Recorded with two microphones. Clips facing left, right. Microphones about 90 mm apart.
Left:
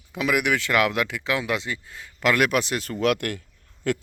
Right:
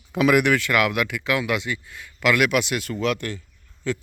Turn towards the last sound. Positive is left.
turn(degrees=55)  # may be behind; listen again after turning